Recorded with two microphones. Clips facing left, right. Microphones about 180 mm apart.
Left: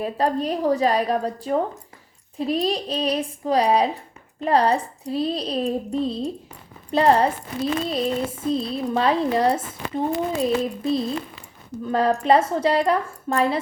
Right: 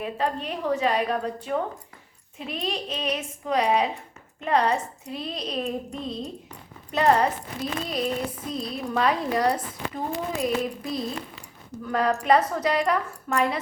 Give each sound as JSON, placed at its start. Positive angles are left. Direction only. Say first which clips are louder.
{"t": 0.0, "sound": "speech", "louder": "left 5 dB", "side_deg": 35}